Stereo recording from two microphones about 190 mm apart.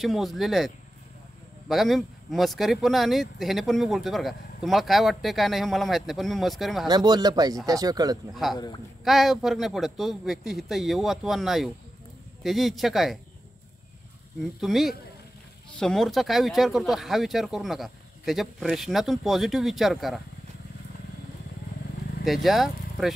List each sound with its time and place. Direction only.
0.0 s speech: centre (ahead or behind)
6.9 s speech: 20° right (ahead or behind)
8.4 s speech: centre (ahead or behind)
14.6 s speech: centre (ahead or behind)
22.2 s speech: centre (ahead or behind)